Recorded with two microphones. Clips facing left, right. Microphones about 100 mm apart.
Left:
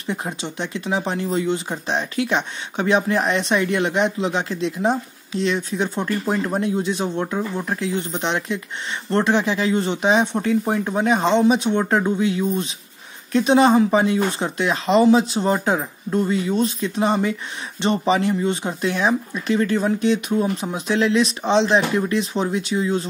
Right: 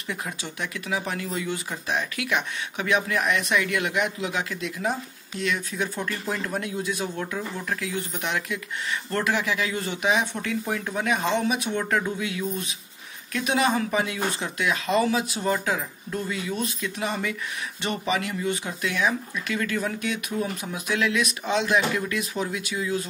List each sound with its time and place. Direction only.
0.0 s speech: 30° left (ahead or behind)